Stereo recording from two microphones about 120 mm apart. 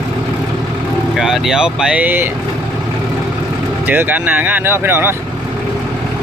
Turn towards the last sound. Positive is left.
turn(degrees=-20)  # may be behind; listen again after turning